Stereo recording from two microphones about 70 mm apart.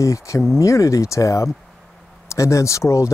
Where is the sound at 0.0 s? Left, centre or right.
Left.